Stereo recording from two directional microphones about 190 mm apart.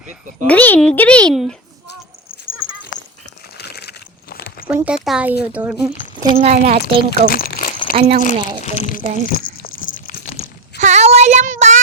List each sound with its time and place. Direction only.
0.4 s a child's voice: 10° left (ahead or behind)
2.6 s dog: 90° left
3.6 s a sound: 60° left (ahead or behind)
4.7 s speech: 5° right (ahead or behind)
5.9 s a sound: 30° left (ahead or behind)
6.3 s a child's voice: 35° right (ahead or behind)
7.3 s crumpling: 50° left (ahead or behind)
7.9 s a child's voice: 35° right (ahead or behind)
8.6 s speech: 35° left (ahead or behind)
9.2 s biting: 50° left (ahead or behind)
10.8 s child singing: 35° right (ahead or behind)